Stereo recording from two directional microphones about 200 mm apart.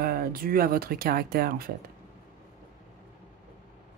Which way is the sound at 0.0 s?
50° right (ahead or behind).